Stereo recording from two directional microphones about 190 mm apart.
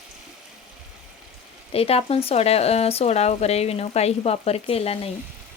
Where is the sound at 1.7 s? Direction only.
30° left (ahead or behind).